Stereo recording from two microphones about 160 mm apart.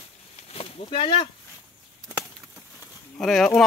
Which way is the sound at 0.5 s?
40° left (ahead or behind).